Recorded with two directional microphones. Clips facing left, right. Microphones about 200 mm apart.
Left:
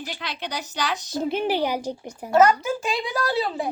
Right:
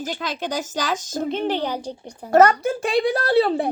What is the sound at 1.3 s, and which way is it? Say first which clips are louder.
Speech: left 1 dB; 5° left (ahead or behind).